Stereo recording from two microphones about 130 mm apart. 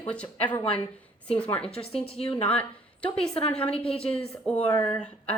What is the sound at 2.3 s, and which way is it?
A woman's voice, 10° left (ahead or behind).